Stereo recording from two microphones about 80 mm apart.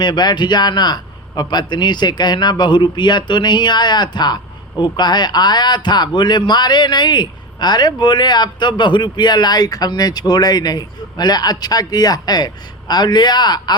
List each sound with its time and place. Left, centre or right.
0.0 s speech: left